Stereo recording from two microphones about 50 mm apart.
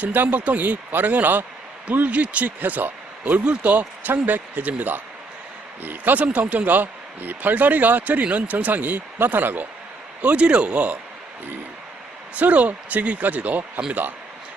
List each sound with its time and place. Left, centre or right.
0.0 s a man's voice: right
6.2 s a man's voice: right
10.2 s speech: right
12.4 s a man's voice: right